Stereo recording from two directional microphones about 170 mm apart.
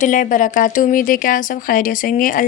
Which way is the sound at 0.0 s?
50° left (ahead or behind).